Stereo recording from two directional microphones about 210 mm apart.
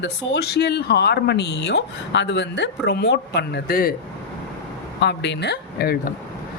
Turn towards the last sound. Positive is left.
turn(degrees=50)  # may be behind; listen again after turning